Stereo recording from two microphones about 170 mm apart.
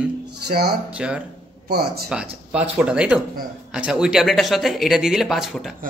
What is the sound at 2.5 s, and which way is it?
A man's voice, 5° right (ahead or behind).